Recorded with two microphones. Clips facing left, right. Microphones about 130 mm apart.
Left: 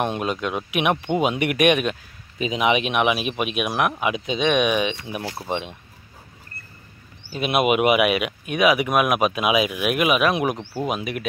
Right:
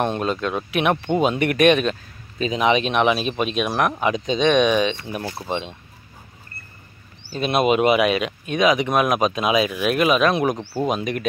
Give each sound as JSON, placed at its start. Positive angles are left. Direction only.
{"t": 0.0, "sound": "speech", "side_deg": 10}
{"t": 7.2, "sound": "speech", "side_deg": 10}
{"t": 10.6, "sound": "speech", "side_deg": -5}
{"t": 10.9, "sound": "speech", "side_deg": 5}